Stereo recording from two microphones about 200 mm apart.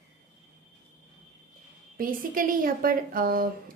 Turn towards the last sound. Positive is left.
turn(degrees=-45)  # may be behind; listen again after turning